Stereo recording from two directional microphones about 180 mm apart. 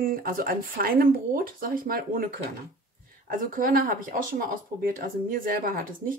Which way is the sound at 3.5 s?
50° right (ahead or behind).